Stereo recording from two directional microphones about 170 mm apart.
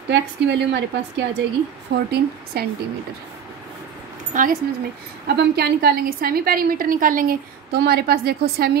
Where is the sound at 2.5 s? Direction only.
65° right (ahead or behind).